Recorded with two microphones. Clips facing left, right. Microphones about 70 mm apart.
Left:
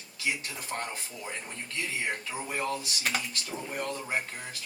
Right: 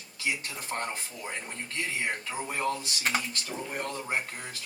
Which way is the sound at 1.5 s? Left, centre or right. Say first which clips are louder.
Right 1 dB; right.